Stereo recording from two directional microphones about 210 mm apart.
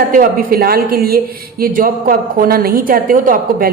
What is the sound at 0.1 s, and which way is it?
A woman's voice, 40° right (ahead or behind).